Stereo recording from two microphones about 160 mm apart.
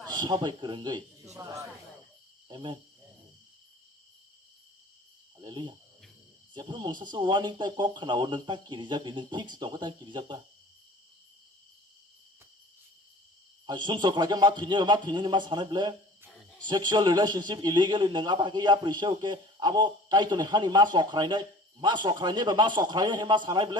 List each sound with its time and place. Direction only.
0.0 s a man's voice: 25° right (ahead or behind)
2.5 s cricket: 30° right (ahead or behind)
5.4 s cricket: 30° right (ahead or behind)
6.5 s a man's voice: 30° right (ahead or behind)
13.7 s a man's voice: 30° right (ahead or behind)